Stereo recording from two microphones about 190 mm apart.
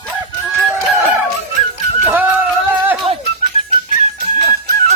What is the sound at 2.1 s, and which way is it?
Music, 10° right (ahead or behind).